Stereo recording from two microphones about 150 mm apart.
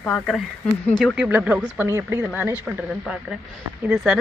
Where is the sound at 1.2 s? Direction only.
10° right (ahead or behind).